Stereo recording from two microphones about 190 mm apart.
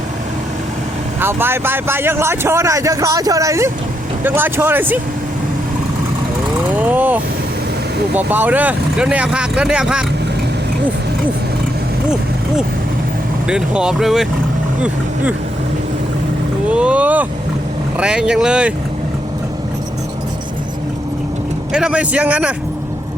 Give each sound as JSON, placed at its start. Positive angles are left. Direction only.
{"t": 1.2, "sound": "a man's voice", "side_deg": -10}
{"t": 6.7, "sound": "vehicle", "side_deg": -10}
{"t": 8.1, "sound": "speech", "side_deg": -10}
{"t": 13.5, "sound": "a man's voice", "side_deg": -5}
{"t": 16.6, "sound": "speech", "side_deg": -5}
{"t": 21.7, "sound": "speech", "side_deg": -5}